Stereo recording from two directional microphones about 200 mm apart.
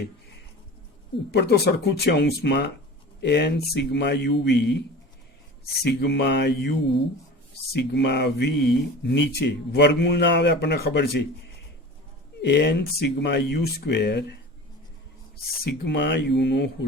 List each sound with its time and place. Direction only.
1.3 s speech: 55° left (ahead or behind)
5.8 s speech: 55° left (ahead or behind)
12.4 s speech: 60° left (ahead or behind)
15.6 s speech: 55° left (ahead or behind)